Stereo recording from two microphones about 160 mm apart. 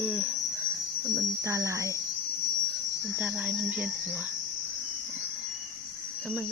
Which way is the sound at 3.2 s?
5° right (ahead or behind).